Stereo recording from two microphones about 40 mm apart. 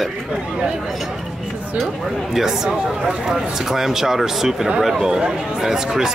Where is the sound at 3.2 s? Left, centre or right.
Centre.